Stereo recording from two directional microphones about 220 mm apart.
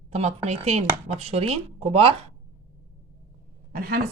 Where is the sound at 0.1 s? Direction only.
30° right (ahead or behind).